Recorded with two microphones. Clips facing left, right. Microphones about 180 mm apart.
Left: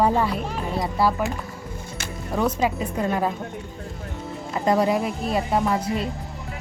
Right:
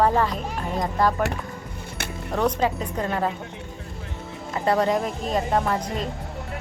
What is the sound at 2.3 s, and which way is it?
Speech, 10° left (ahead or behind).